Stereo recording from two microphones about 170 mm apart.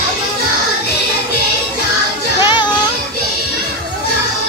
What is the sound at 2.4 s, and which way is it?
Music, 25° left (ahead or behind).